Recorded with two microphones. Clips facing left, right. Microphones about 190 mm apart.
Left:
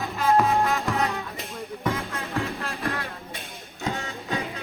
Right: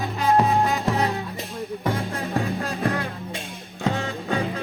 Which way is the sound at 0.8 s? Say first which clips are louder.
Right 3 dB; 35° right (ahead or behind).